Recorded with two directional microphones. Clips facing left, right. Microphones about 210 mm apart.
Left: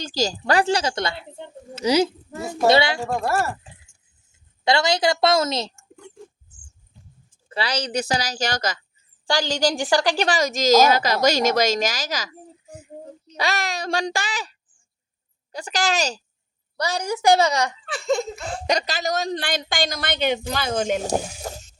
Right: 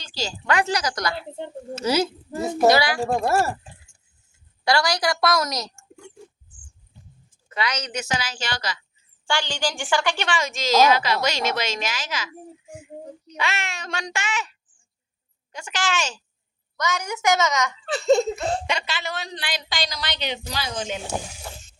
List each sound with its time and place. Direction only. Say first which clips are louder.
0.0 s a woman's voice: left 7 dB; 40° left (ahead or behind); by 2.0 s 15° left (ahead or behind)
2.3 s a child's voice: right 3 dB; 20° right (ahead or behind)
2.6 s speech: left 1 dB; 25° left (ahead or behind)
3.2 s a child's voice: right 1 dB; 25° right (ahead or behind)
4.3 s a woman's voice: left 2 dB; 25° left (ahead or behind)
7.5 s a woman's voice: left 3 dB; 30° left (ahead or behind)
15.5 s a woman's voice: left 3 dB; 35° left (ahead or behind)
17.9 s laughter: right 6 dB; 35° right (ahead or behind)
18.6 s a woman's voice: left 5 dB; 40° left (ahead or behind)